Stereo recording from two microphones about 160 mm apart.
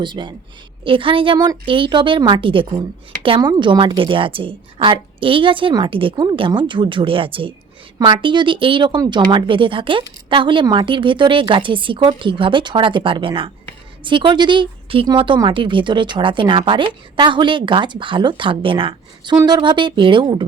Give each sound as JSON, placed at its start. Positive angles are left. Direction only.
{"t": 0.0, "sound": "a woman's voice", "side_deg": -30}